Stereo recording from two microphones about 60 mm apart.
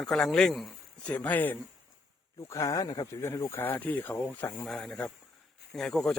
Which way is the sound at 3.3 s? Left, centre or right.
Left.